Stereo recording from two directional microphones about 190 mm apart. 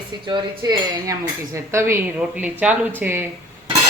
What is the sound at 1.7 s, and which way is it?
Speech, 10° right (ahead or behind).